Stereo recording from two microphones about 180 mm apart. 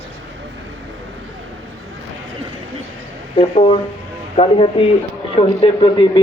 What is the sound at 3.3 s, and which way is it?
A man's voice, 30° left (ahead or behind).